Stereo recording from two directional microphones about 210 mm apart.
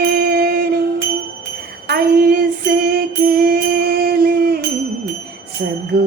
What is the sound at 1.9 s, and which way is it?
Music, 45° right (ahead or behind).